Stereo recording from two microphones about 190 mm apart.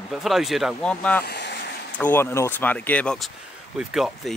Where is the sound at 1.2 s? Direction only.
60° left (ahead or behind).